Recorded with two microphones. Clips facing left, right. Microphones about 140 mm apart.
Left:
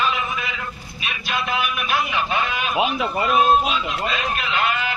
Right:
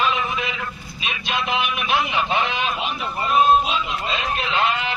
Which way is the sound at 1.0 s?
20° right (ahead or behind).